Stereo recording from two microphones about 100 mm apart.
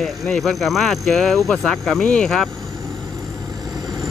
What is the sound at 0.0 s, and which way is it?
Speech, centre (ahead or behind).